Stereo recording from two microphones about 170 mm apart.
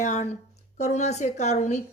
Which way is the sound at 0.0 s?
45° left (ahead or behind).